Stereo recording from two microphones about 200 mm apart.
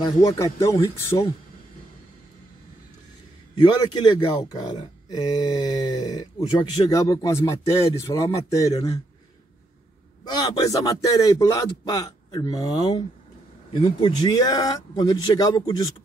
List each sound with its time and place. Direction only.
0.0 s speech: 20° left (ahead or behind)
3.5 s speech: 20° left (ahead or behind)
10.2 s speech: 20° left (ahead or behind)